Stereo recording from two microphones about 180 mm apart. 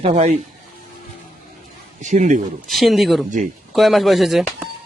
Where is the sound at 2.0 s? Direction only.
40° right (ahead or behind).